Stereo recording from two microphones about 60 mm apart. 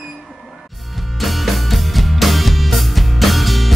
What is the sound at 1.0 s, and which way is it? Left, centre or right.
Music, centre.